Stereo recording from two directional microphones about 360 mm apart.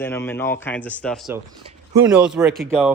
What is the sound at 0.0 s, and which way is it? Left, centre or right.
Speech, centre.